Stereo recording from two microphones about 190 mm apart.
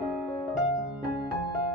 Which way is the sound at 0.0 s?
Centre (ahead or behind).